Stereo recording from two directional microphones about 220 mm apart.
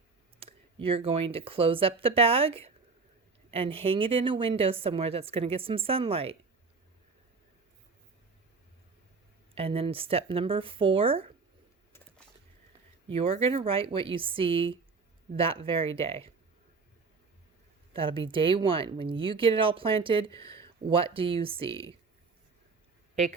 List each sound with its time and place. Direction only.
0.3 s a woman's voice: 25° right (ahead or behind)
9.6 s a woman's voice: 25° right (ahead or behind)
13.1 s a woman's voice: 25° right (ahead or behind)
17.9 s a woman's voice: 25° right (ahead or behind)